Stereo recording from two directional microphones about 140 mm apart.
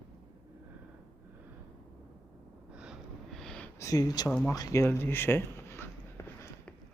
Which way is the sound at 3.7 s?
25° left (ahead or behind).